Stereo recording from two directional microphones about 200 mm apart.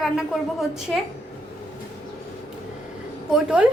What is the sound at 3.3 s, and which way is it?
Speech, 5° right (ahead or behind).